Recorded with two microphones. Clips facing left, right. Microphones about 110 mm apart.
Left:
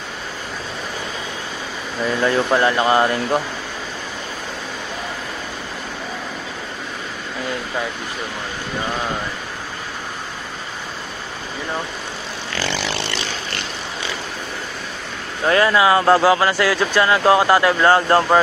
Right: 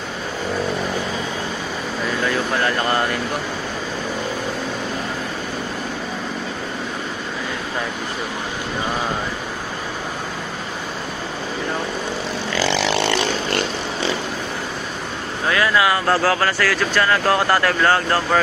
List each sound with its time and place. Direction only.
2.5 s speech: 20° left (ahead or behind)
15.4 s speech: 30° left (ahead or behind)